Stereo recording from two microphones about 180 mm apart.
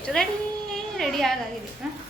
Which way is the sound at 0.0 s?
5° left (ahead or behind).